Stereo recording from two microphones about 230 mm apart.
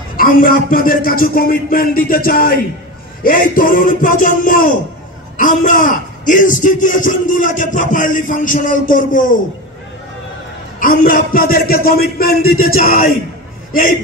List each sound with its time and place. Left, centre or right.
0.1 s a man's voice: left
10.8 s a man's voice: left